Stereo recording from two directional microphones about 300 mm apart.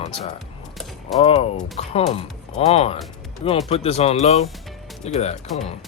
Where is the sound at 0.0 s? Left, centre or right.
Centre.